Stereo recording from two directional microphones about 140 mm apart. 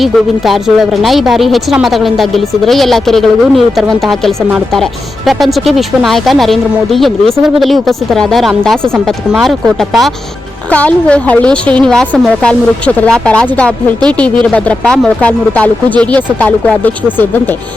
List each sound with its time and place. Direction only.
0.0 s a woman's voice: centre (ahead or behind)